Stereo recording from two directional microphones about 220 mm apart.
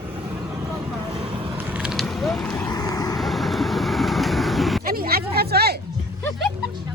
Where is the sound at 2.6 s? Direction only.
15° left (ahead or behind).